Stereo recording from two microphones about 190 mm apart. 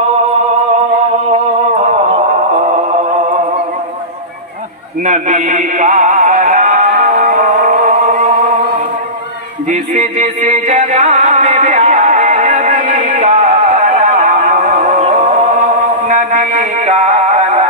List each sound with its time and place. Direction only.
1.3 s music: 35° right (ahead or behind)
5.0 s music: 40° right (ahead or behind)
9.7 s music: 40° right (ahead or behind)
16.1 s music: 40° right (ahead or behind)